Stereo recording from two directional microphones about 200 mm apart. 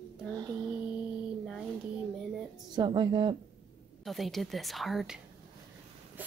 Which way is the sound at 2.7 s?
20° right (ahead or behind).